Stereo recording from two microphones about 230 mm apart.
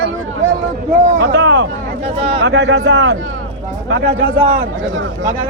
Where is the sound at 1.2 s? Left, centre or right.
Right.